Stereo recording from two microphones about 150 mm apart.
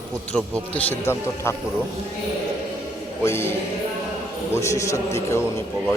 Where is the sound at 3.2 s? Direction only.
15° left (ahead or behind).